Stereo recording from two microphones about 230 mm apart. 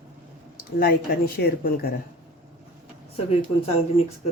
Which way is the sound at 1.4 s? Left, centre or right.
Left.